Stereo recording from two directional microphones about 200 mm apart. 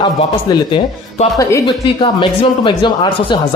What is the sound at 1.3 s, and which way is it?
Speech, 20° left (ahead or behind).